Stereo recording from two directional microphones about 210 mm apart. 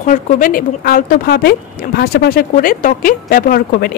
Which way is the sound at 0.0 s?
40° left (ahead or behind).